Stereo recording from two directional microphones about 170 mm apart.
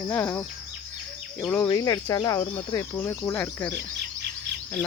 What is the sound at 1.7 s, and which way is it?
Speech, 20° left (ahead or behind).